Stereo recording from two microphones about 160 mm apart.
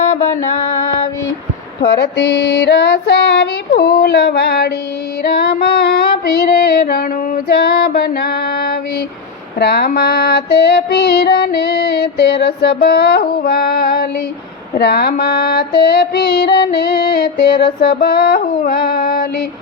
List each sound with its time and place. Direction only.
1.8 s female singing: 90° left
9.6 s music: 90° left; by 19.3 s 65° left (ahead or behind)